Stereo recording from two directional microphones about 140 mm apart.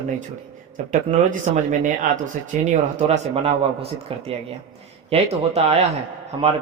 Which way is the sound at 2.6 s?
45° right (ahead or behind).